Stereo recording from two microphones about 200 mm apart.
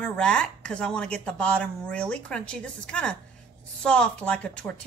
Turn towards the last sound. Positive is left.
turn(degrees=5)  # may be behind; listen again after turning